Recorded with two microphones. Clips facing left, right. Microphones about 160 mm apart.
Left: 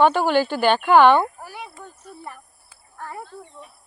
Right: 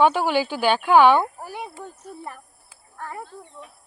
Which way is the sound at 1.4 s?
25° right (ahead or behind).